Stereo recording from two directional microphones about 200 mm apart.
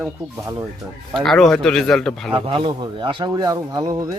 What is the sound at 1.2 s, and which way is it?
Speech, centre (ahead or behind).